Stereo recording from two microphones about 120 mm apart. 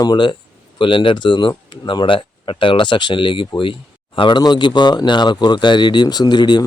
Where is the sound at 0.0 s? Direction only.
40° left (ahead or behind).